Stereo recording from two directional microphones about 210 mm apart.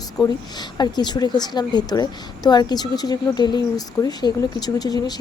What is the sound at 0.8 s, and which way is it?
A woman's voice, 20° left (ahead or behind).